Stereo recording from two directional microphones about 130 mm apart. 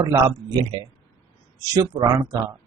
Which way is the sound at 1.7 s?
30° right (ahead or behind).